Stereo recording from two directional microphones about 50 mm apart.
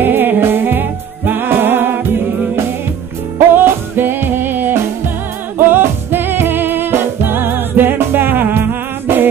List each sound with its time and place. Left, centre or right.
0.0 s music: right
3.5 s music: right